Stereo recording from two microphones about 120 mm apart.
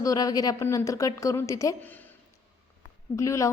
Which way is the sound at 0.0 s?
30° left (ahead or behind).